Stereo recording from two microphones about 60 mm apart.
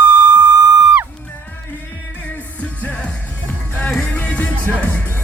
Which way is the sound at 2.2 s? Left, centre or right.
Left.